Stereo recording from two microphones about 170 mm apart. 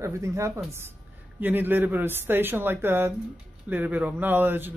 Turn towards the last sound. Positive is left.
turn(degrees=-10)  # may be behind; listen again after turning